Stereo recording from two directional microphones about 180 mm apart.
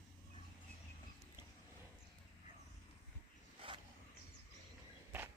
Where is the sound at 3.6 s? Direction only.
30° right (ahead or behind).